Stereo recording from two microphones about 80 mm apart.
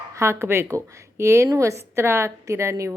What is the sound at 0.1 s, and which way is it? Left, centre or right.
A woman's voice, right.